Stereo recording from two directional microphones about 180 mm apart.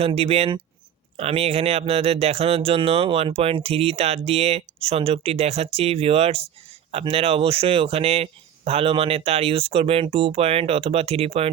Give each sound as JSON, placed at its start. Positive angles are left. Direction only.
{"t": 0.0, "sound": "speech", "side_deg": -35}